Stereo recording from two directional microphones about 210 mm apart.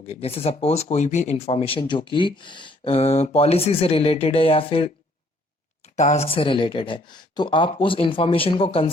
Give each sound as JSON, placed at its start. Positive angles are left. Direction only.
{"t": 0.1, "sound": "speech", "side_deg": 30}